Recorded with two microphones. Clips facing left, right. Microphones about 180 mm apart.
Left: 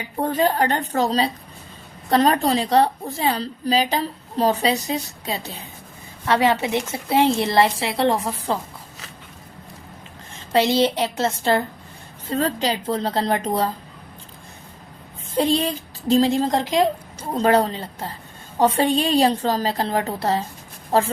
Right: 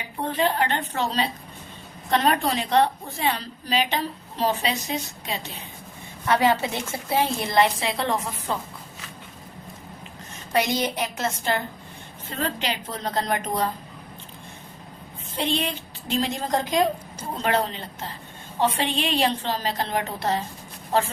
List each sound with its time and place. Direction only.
0.2 s a woman's voice: 40° left (ahead or behind)
10.5 s a woman's voice: 30° left (ahead or behind)
15.4 s a woman's voice: 35° left (ahead or behind)
17.3 s a woman's voice: 35° left (ahead or behind)